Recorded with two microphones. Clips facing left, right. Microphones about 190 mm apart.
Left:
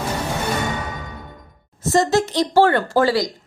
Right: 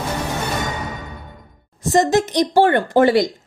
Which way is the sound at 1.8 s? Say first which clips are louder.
Right 1 dB; 15° right (ahead or behind).